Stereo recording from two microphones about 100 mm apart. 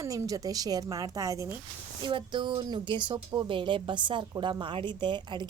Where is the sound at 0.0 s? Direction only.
35° right (ahead or behind).